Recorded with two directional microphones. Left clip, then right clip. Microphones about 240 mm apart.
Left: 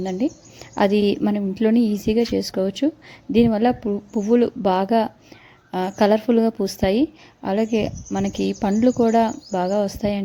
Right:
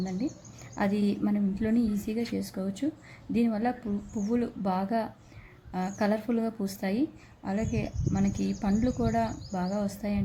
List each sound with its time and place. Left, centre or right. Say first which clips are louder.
0.0 s a woman's voice: left 10 dB; left